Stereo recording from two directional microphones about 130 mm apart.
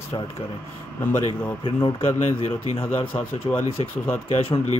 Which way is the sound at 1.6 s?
45° left (ahead or behind).